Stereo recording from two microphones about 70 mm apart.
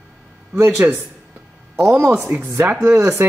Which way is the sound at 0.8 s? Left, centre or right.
Right.